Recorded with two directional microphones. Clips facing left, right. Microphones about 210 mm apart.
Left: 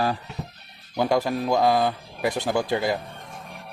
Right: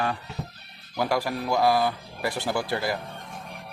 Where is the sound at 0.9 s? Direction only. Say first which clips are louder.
Left 4 dB; 20° left (ahead or behind).